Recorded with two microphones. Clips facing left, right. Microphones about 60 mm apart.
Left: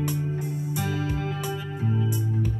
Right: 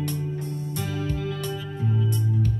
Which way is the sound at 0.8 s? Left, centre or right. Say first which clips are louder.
Left 1 dB; centre.